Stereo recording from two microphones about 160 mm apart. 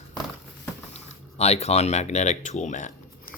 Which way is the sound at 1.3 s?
40° left (ahead or behind).